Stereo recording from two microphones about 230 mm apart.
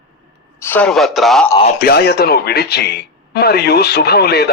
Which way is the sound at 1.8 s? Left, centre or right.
Left.